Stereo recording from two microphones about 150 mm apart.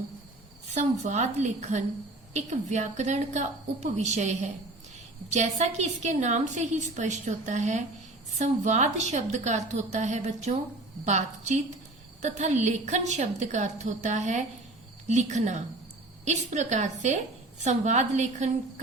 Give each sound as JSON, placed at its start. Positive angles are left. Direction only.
{"t": 0.7, "sound": "a woman's voice", "side_deg": -50}